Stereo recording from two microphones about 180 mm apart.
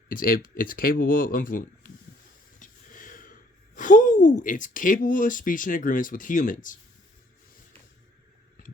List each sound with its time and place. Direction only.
0.1 s speech: 50° left (ahead or behind)
2.6 s a sound: 50° left (ahead or behind)
3.8 s speech: 45° left (ahead or behind)